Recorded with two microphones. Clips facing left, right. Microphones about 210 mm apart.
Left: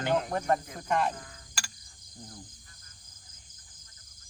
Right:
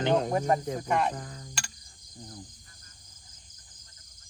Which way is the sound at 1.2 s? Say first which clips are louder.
Right 7 dB; 35° right (ahead or behind).